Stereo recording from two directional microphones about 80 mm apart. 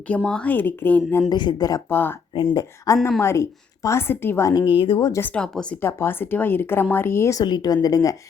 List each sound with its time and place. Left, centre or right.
0.3 s speech: centre
0.5 s speech: left
1.3 s speech: left
1.9 s speech: left
2.3 s speech: left
2.6 s speech: left
3.2 s a woman's voice: left
4.6 s speech: left
5.2 s speech: centre
5.8 s a woman's voice: left
7.3 s speech: left